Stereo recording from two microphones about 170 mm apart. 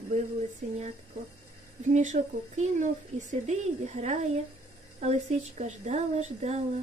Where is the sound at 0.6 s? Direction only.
45° right (ahead or behind).